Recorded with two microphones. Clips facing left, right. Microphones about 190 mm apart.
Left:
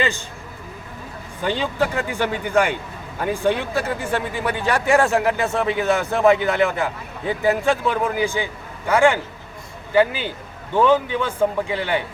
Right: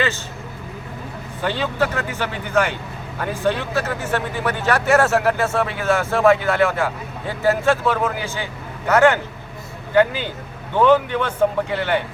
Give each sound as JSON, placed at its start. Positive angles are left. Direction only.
{"t": 1.5, "sound": "a man's voice", "side_deg": 15}